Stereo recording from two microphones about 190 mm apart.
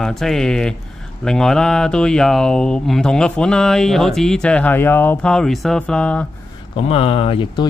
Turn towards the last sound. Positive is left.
turn(degrees=30)  # may be behind; listen again after turning